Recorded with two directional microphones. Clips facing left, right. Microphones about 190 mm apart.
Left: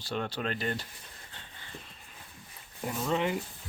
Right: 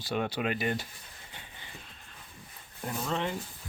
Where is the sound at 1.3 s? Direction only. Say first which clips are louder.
Right 4 dB; 15° right (ahead or behind).